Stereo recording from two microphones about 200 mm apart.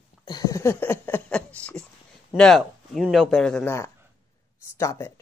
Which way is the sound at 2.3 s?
5° left (ahead or behind).